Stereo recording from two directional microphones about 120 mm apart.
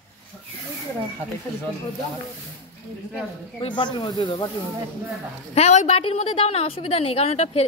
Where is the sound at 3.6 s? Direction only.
45° left (ahead or behind).